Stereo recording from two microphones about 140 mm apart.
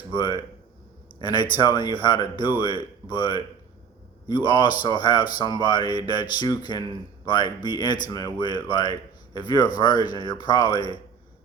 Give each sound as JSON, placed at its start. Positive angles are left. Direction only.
{"t": 0.1, "sound": "speech", "side_deg": 30}